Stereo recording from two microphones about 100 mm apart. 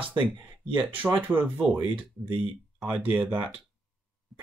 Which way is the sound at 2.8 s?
15° right (ahead or behind).